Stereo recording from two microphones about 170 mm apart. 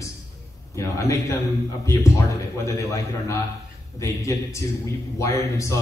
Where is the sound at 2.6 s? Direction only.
15° left (ahead or behind).